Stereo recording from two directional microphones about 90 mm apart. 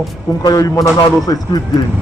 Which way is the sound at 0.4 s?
40° left (ahead or behind).